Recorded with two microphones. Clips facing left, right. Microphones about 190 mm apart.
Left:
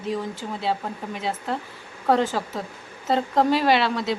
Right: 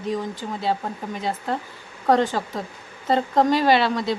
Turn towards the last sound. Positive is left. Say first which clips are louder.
# right 2 dB
turn(degrees=0)  # may be behind; listen again after turning